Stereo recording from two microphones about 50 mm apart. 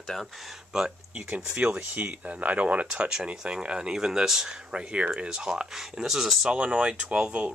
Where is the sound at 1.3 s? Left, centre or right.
Right; by 6.5 s centre.